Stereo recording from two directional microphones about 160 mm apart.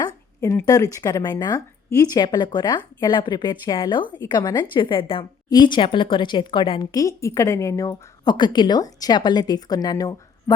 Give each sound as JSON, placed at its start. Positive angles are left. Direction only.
{"t": 0.6, "sound": "a woman's voice", "side_deg": 20}